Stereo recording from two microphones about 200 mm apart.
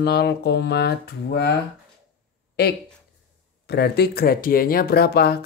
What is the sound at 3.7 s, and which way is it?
Speech, 55° left (ahead or behind).